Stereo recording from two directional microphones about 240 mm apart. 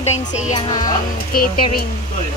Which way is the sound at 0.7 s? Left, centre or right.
Centre.